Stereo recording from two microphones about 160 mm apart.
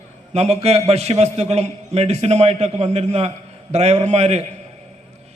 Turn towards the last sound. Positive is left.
turn(degrees=-45)  # may be behind; listen again after turning